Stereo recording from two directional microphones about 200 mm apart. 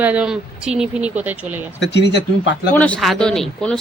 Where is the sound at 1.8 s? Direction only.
60° left (ahead or behind).